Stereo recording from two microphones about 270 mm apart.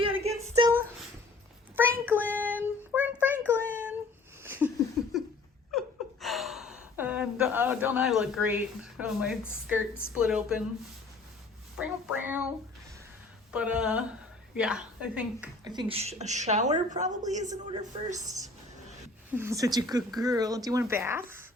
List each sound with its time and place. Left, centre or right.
0.2 s a sound: right
1.7 s child singing: centre
4.4 s a sound: centre
5.7 s a sound: centre
9.6 s a woman's voice: centre
11.8 s a woman's voice: centre
13.5 s a woman's voice: centre
15.6 s a woman's voice: centre
19.4 s speech: centre